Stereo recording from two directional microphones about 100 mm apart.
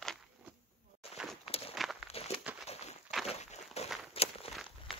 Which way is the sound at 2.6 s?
90° left.